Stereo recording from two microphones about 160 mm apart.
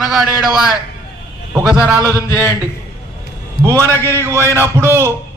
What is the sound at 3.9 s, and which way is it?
Speech, 15° left (ahead or behind).